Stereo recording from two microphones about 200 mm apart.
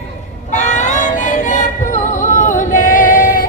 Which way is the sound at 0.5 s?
35° left (ahead or behind).